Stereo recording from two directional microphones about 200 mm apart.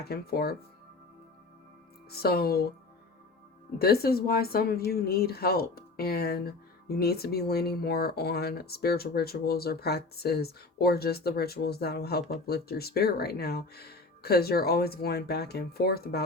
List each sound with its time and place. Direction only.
0.0 s speech: 50° left (ahead or behind)
2.0 s speech: 50° left (ahead or behind)
3.8 s speech: 50° left (ahead or behind)